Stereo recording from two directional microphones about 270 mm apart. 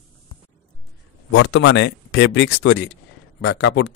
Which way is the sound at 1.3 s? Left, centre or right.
Left.